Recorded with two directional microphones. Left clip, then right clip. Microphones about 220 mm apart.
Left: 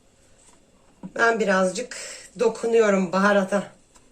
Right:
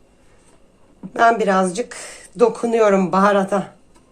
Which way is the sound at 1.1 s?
45° right (ahead or behind).